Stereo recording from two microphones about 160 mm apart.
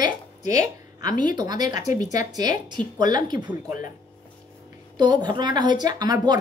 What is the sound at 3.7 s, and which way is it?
Speech, 55° left (ahead or behind).